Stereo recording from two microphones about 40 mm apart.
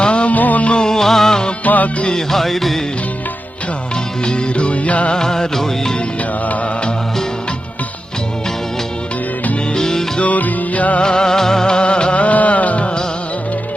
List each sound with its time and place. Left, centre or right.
0.0 s music: left
0.3 s music: left
0.7 s music: centre
1.6 s music: left
2.1 s music: centre
4.3 s music: left
5.1 s music: centre
9.7 s music: centre
10.2 s music: left
11.0 s music of bollywood: centre; by 12.9 s left